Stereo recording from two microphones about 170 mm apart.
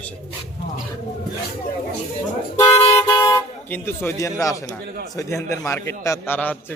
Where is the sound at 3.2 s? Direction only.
20° left (ahead or behind).